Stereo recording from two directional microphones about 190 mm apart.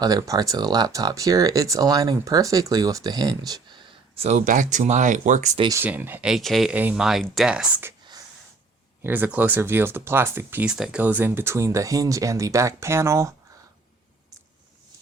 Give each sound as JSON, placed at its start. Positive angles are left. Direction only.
{"t": 0.0, "sound": "speech", "side_deg": -20}
{"t": 5.6, "sound": "speech", "side_deg": -10}